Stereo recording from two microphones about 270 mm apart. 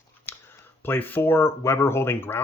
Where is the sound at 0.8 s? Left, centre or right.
Centre.